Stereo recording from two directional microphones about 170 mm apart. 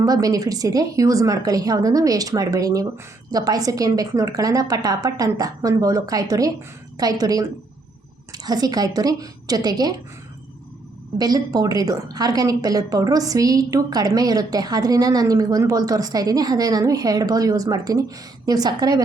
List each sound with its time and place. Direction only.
0.0 s a woman's voice: 20° right (ahead or behind)
11.2 s a woman's voice: 20° right (ahead or behind)